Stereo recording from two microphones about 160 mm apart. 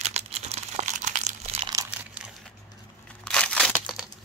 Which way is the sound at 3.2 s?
5° left (ahead or behind).